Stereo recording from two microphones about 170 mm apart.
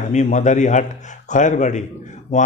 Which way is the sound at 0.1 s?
45° left (ahead or behind).